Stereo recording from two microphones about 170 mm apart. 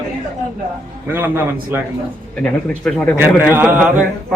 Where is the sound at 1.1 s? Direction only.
10° right (ahead or behind).